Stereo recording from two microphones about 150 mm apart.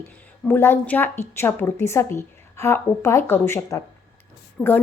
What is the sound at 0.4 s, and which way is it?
A woman's voice, 15° left (ahead or behind).